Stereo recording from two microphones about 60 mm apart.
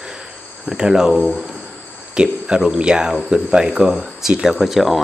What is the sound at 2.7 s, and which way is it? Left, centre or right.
Speech, centre.